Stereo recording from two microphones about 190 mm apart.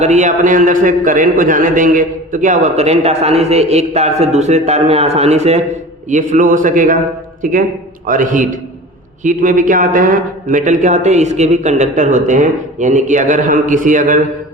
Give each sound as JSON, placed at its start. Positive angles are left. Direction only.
{"t": 0.0, "sound": "a man's voice", "side_deg": -40}